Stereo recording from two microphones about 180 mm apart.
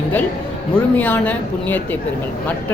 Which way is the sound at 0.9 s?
10° left (ahead or behind).